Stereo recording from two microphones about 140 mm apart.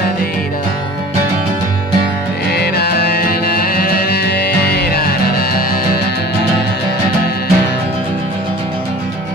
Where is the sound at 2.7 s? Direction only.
90° left.